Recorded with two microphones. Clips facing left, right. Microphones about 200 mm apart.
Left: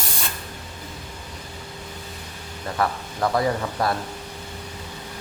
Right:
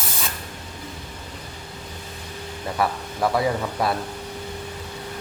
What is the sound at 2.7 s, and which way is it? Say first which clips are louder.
Speech: even; 10° right (ahead or behind).